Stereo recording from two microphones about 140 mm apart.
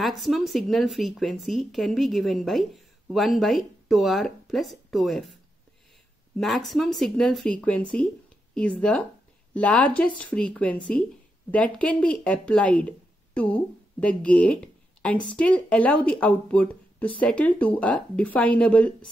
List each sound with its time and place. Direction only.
0.0 s a woman's voice: centre (ahead or behind)